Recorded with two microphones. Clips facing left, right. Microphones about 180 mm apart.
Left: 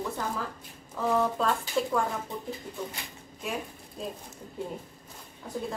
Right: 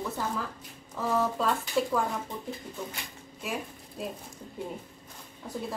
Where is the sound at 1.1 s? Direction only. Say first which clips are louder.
Left 1 dB; centre (ahead or behind).